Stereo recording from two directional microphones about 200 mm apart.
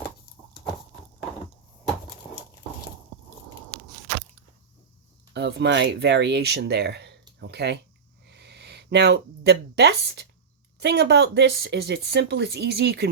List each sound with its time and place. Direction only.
5.3 s speech: 60° right (ahead or behind)
7.3 s a sound: 55° right (ahead or behind)
8.3 s speech: 55° right (ahead or behind)